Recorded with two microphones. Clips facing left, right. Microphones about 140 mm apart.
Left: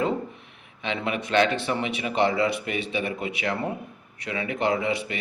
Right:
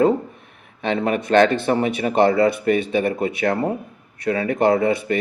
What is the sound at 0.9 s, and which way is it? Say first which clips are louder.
Speech: right 8 dB; 45° right (ahead or behind).